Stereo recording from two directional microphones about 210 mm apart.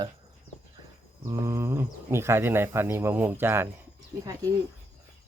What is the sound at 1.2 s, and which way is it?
Speech, 15° right (ahead or behind).